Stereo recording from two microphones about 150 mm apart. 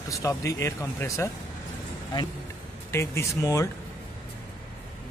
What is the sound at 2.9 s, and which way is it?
Speech, 20° left (ahead or behind).